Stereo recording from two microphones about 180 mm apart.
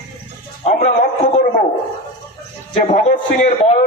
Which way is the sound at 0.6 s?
40° left (ahead or behind).